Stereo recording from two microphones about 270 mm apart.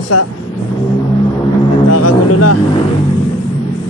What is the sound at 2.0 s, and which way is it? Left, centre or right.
Music, left.